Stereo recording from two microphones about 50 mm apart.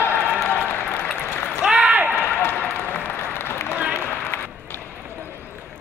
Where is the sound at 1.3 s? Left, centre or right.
Left.